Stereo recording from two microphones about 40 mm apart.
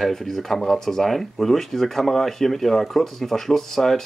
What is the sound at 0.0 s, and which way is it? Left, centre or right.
Speech, centre.